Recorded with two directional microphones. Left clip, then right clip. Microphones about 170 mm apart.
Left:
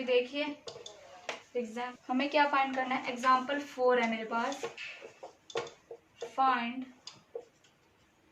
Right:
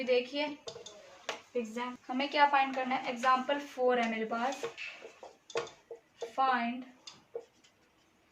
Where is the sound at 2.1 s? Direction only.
30° left (ahead or behind).